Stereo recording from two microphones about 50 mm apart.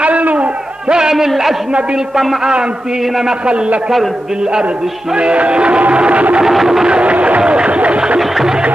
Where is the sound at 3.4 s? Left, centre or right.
Right.